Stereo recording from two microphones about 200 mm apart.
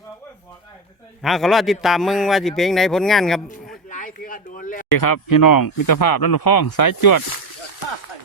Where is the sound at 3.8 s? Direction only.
40° left (ahead or behind).